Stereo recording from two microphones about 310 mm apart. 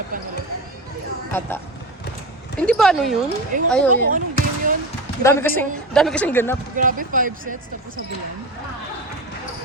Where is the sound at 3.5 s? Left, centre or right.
Right.